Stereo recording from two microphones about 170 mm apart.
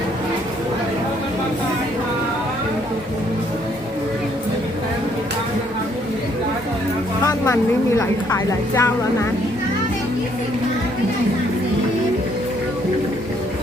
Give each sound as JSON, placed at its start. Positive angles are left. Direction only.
{"t": 7.3, "sound": "a woman's voice", "side_deg": 15}